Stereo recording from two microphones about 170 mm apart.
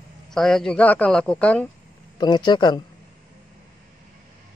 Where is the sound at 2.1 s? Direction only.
25° left (ahead or behind).